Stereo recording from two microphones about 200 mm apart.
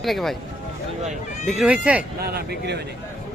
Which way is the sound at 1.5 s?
5° right (ahead or behind).